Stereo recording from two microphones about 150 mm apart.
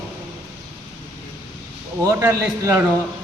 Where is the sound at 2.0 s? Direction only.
20° right (ahead or behind).